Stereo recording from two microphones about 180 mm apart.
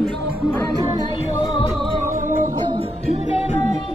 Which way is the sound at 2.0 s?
45° right (ahead or behind).